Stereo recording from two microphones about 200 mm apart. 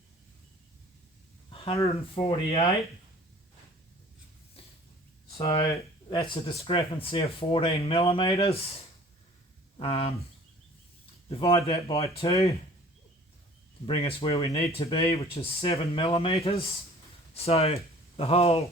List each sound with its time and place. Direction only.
1.7 s speech: 15° left (ahead or behind)
2.1 s speech: 30° left (ahead or behind)
5.3 s speech: 30° left (ahead or behind)
11.3 s speech: 30° left (ahead or behind)
13.8 s speech: 30° left (ahead or behind)